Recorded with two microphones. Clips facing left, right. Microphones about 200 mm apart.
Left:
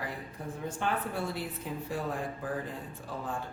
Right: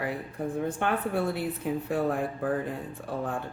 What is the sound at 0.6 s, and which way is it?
A woman's voice, 60° right (ahead or behind).